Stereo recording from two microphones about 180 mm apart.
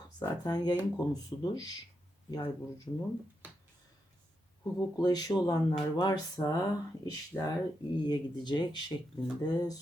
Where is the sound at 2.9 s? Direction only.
20° left (ahead or behind).